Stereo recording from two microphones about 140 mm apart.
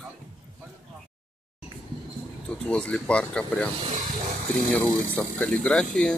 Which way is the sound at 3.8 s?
55° right (ahead or behind).